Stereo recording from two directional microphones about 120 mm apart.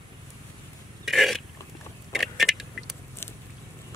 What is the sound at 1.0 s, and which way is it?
Burping, centre (ahead or behind).